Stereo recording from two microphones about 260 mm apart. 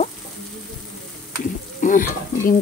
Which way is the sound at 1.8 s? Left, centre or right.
Left.